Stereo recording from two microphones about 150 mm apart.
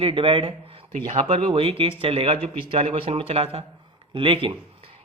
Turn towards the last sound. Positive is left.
turn(degrees=-40)  # may be behind; listen again after turning